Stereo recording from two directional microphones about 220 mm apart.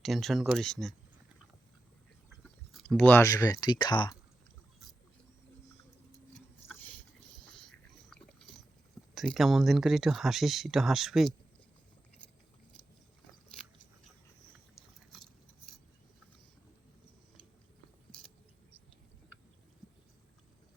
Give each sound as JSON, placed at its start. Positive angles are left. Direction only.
{"t": 0.0, "sound": "speech", "side_deg": 0}
{"t": 2.4, "sound": "speech", "side_deg": 5}
{"t": 6.7, "sound": "a sound", "side_deg": 5}
{"t": 9.1, "sound": "speech", "side_deg": 0}